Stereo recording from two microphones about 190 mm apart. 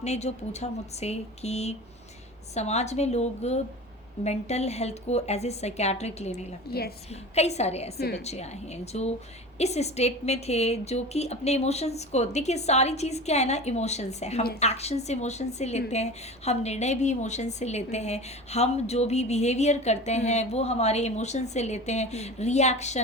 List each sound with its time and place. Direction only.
0.0 s a woman's voice: 35° left (ahead or behind)
6.7 s a woman's voice: 55° left (ahead or behind)
7.3 s a woman's voice: 35° left (ahead or behind)
7.9 s a woman's voice: 55° left (ahead or behind)
8.2 s a woman's voice: 35° left (ahead or behind)